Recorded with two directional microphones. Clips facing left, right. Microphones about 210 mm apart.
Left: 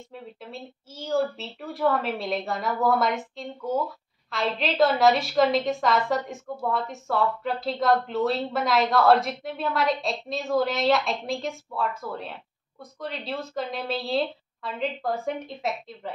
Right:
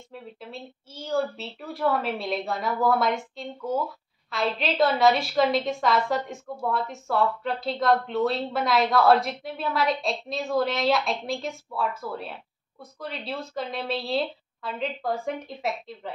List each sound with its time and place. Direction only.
0.1 s a woman's voice: centre (ahead or behind)